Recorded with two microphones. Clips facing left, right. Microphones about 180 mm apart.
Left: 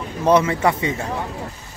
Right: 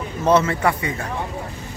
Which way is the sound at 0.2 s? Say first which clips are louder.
Left 1 dB; 15° left (ahead or behind).